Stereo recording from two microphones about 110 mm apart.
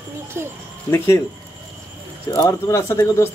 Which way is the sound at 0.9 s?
25° left (ahead or behind).